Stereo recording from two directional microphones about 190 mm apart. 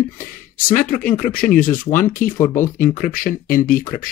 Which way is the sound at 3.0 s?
45° left (ahead or behind).